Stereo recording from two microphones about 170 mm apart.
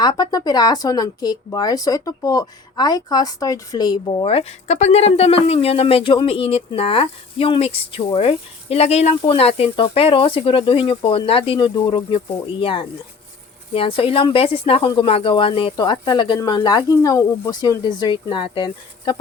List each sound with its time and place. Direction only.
0.0 s a woman's voice: 25° left (ahead or behind)